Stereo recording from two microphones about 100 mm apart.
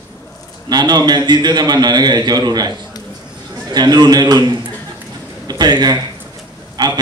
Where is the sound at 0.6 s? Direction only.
45° right (ahead or behind).